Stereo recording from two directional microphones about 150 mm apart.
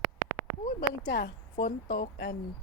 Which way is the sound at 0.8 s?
90° left.